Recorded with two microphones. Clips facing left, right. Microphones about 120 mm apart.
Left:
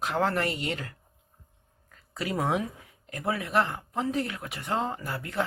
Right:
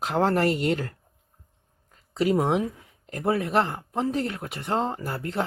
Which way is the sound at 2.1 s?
25° right (ahead or behind).